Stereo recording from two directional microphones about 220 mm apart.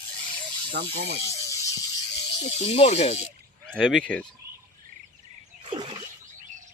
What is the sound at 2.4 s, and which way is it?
Speech, 30° left (ahead or behind).